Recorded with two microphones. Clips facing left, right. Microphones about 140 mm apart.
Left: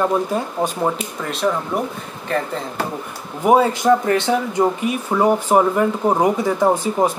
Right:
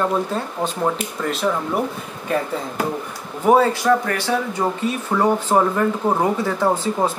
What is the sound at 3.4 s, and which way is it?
A man's voice, 15° left (ahead or behind).